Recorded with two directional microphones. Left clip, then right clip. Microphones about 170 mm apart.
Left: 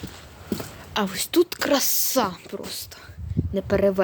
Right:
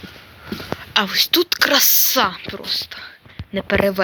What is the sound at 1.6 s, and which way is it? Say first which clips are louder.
A woman's voice: right 7 dB; 15° left (ahead or behind).